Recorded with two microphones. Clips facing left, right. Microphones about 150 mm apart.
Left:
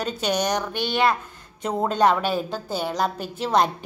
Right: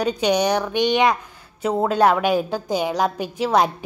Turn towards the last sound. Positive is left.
turn(degrees=-10)  # may be behind; listen again after turning